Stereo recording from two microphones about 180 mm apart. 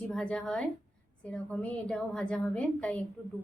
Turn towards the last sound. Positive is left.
turn(degrees=10)  # may be behind; listen again after turning